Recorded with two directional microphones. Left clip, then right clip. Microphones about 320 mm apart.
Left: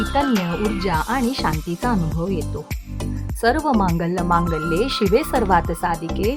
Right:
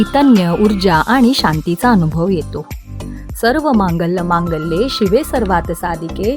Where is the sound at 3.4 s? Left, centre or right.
Centre.